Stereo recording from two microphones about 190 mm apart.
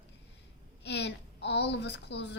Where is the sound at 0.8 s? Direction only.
65° left (ahead or behind).